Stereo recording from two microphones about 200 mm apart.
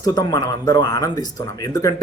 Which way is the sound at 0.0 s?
20° left (ahead or behind).